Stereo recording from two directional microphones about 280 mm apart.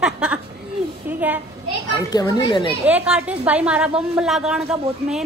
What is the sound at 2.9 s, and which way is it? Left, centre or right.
A woman's voice, centre.